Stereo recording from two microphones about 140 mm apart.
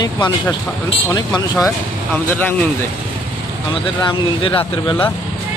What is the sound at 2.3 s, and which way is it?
Speech, 15° left (ahead or behind).